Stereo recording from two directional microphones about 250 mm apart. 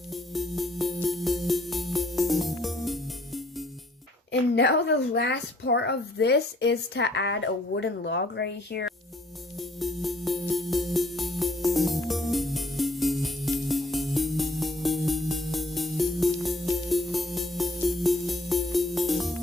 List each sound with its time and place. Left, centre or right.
0.1 s music: centre
4.3 s a woman's voice: left
9.6 s music: centre